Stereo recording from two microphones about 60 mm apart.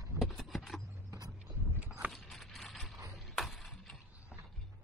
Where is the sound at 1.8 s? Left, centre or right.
Centre.